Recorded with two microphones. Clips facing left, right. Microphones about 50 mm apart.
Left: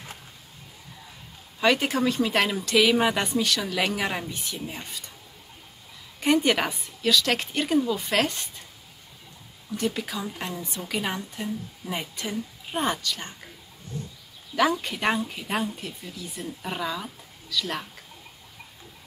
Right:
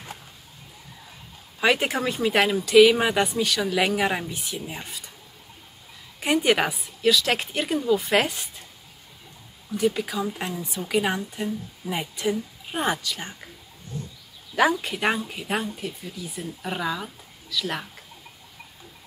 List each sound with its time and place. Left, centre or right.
1.6 s a woman's voice: centre
6.1 s a woman's voice: centre
9.8 s a woman's voice: centre
14.5 s speech: centre